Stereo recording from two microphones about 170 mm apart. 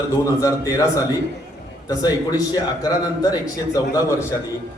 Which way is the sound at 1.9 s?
20° left (ahead or behind).